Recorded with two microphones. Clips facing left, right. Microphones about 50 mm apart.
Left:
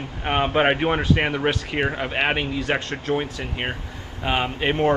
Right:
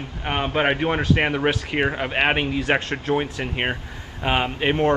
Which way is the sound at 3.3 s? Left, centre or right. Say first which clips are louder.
Right 3 dB; right.